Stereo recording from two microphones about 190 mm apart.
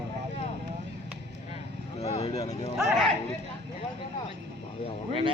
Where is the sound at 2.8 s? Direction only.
Centre (ahead or behind).